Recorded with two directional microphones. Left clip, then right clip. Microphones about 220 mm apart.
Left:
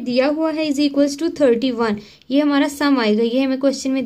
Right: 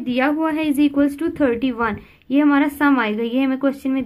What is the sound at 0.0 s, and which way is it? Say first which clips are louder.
A woman's voice: left 2 dB; 25° left (ahead or behind).